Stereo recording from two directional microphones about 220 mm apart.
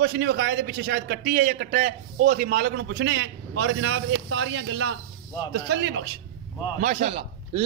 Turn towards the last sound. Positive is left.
turn(degrees=-25)  # may be behind; listen again after turning